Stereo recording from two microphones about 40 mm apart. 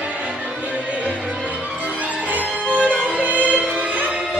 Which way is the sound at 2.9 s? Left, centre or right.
Right.